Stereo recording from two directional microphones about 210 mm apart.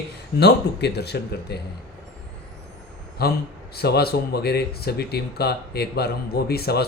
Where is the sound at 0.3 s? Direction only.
50° left (ahead or behind).